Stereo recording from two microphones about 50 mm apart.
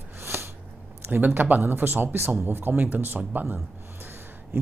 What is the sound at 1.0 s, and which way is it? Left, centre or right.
Speech, right.